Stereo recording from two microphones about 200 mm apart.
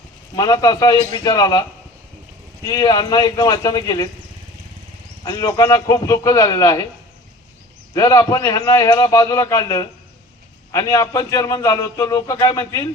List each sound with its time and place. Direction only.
0.3 s speech: 20° left (ahead or behind)
2.6 s speech: 20° left (ahead or behind)
5.2 s a man's voice: 20° left (ahead or behind)
7.9 s a man's voice: 15° left (ahead or behind)